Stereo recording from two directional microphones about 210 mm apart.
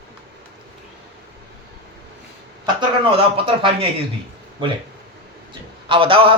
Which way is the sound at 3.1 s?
25° right (ahead or behind).